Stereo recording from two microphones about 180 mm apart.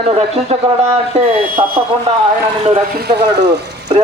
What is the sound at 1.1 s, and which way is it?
Speech, 50° right (ahead or behind).